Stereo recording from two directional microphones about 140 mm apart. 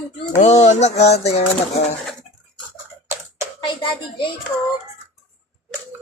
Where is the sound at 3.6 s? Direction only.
35° left (ahead or behind).